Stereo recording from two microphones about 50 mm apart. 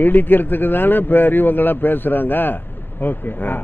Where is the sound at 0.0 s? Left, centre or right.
Left.